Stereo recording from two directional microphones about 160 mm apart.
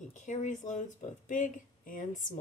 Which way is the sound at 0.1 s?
50° left (ahead or behind).